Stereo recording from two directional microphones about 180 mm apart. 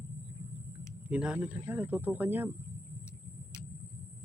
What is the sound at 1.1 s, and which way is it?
Speech, 5° right (ahead or behind).